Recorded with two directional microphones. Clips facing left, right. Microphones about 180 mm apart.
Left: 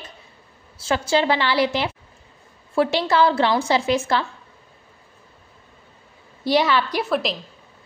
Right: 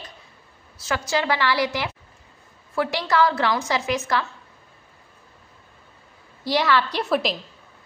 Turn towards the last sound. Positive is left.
turn(degrees=0)  # may be behind; listen again after turning